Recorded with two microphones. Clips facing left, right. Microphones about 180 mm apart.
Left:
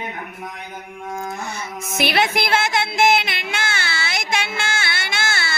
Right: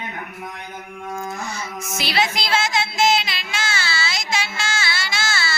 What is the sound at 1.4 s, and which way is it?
Music, 60° left (ahead or behind).